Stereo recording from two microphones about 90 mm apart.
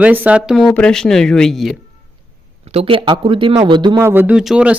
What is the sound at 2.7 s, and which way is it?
Speech, 85° right.